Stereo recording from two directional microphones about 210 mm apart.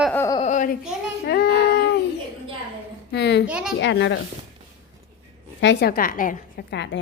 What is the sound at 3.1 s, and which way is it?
Speech, 55° left (ahead or behind).